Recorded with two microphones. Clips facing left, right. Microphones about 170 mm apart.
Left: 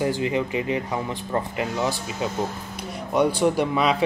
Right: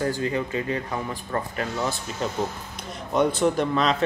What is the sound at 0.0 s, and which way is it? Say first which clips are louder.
Speech: left 2 dB; 20° left (ahead or behind).